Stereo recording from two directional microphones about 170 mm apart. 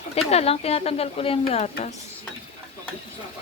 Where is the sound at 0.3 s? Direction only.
35° left (ahead or behind).